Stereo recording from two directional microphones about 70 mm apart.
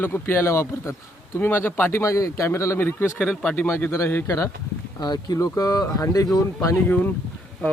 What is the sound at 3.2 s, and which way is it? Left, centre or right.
Speech, centre.